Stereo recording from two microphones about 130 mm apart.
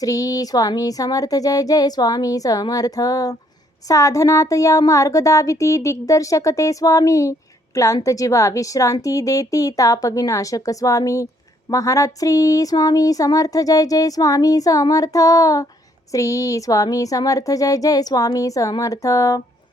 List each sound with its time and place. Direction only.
0.0 s speech: 25° left (ahead or behind)